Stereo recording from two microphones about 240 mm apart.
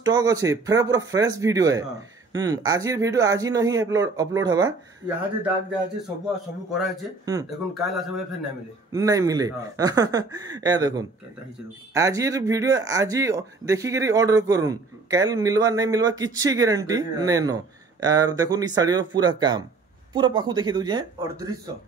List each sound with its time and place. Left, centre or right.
0.0 s speech: centre
6.7 s speech: centre
8.9 s speech: centre